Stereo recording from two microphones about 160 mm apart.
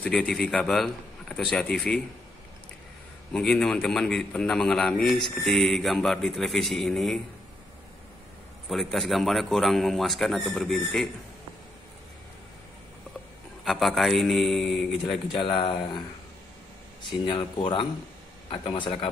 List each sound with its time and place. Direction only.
0.0 s a man's voice: 5° left (ahead or behind)
3.3 s a man's voice: 5° left (ahead or behind)
8.6 s a man's voice: centre (ahead or behind)
13.7 s a man's voice: centre (ahead or behind)
15.4 s speech: 30° left (ahead or behind)
17.3 s speech: 30° left (ahead or behind)